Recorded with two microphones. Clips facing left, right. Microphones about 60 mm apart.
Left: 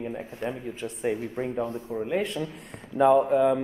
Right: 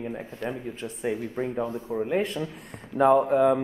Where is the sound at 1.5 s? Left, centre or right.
Centre.